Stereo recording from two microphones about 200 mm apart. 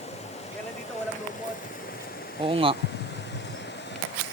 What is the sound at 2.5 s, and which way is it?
Speech, 25° right (ahead or behind).